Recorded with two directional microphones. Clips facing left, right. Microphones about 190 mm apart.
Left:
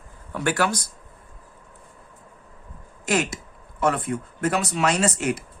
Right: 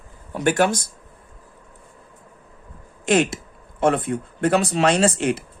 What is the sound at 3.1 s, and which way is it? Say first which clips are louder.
Speech: right 5 dB; 30° right (ahead or behind).